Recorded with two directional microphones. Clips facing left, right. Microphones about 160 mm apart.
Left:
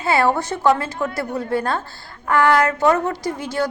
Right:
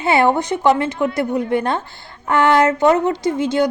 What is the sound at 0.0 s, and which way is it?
A woman's voice, 20° right (ahead or behind).